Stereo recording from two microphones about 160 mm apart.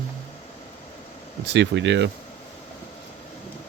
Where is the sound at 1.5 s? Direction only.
90° right.